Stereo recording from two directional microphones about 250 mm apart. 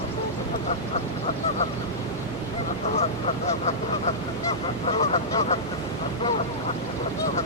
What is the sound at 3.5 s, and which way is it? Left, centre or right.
Goose, left.